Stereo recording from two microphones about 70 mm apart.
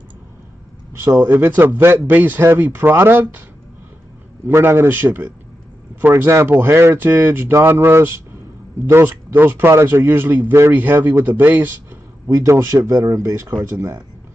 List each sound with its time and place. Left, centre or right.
1.2 s speech: right
4.5 s speech: right
12.4 s speech: right